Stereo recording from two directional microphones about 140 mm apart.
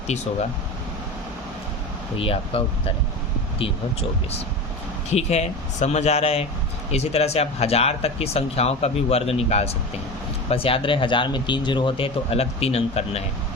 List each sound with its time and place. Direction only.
2.1 s speech: 40° left (ahead or behind)
5.1 s speech: 50° left (ahead or behind)